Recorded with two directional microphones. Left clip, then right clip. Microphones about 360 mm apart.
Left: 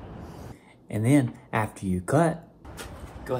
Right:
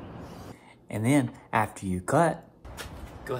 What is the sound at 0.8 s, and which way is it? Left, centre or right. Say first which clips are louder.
Speech: left 2 dB; centre.